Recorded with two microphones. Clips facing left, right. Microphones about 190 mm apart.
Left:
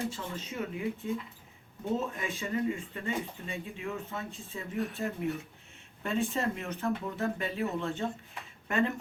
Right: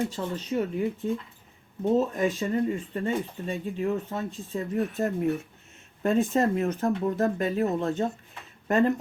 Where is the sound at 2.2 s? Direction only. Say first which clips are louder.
Right 8 dB; 40° right (ahead or behind).